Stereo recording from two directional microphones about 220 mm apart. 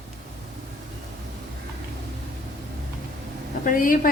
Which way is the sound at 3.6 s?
40° left (ahead or behind).